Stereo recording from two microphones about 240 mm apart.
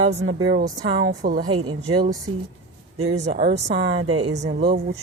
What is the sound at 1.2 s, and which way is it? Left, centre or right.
Speech, right.